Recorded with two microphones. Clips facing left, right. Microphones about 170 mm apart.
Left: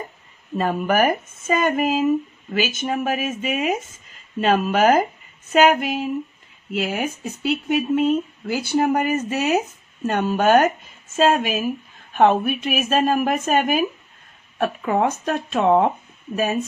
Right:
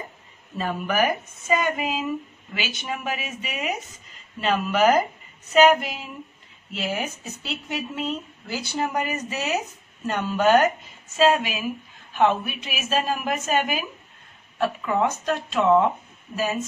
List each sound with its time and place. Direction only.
0.6 s speech: 50° left (ahead or behind)